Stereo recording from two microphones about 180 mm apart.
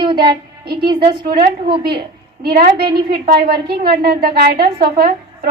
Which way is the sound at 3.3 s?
60° right (ahead or behind).